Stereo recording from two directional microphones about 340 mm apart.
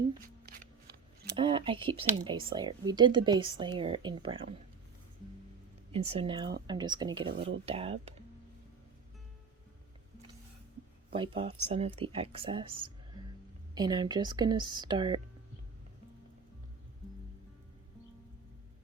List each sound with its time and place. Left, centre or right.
0.4 s shuffling cards: right
1.4 s speech: centre
5.9 s speech: centre
11.1 s speech: centre
13.7 s speech: centre